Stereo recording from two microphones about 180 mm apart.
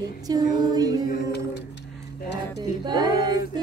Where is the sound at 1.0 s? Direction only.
60° left (ahead or behind).